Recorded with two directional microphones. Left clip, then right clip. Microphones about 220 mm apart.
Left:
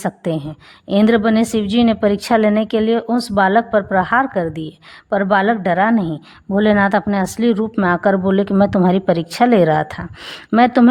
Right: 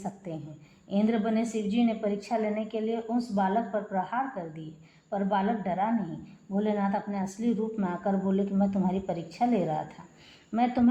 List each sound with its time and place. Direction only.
0.9 s speech: 50° left (ahead or behind)